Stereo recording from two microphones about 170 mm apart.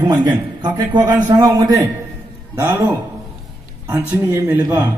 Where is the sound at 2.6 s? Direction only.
15° right (ahead or behind).